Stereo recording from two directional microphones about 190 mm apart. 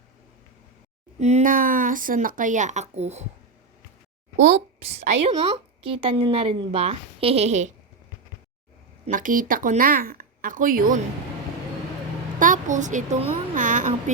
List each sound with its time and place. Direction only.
1.2 s a woman's voice: 40° right (ahead or behind)
4.4 s a woman's voice: 35° right (ahead or behind)
9.0 s speech: 45° right (ahead or behind)
12.4 s speech: 40° right (ahead or behind)